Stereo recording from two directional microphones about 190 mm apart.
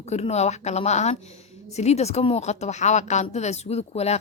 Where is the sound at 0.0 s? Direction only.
35° left (ahead or behind).